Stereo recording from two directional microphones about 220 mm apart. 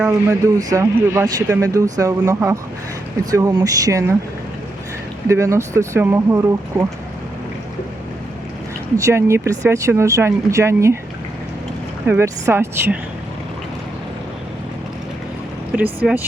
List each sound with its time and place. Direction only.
0.3 s speech: 15° right (ahead or behind)
5.3 s speech: 15° right (ahead or behind)
9.0 s speech: 15° right (ahead or behind)
12.0 s speech: 10° right (ahead or behind)
16.0 s speech: centre (ahead or behind)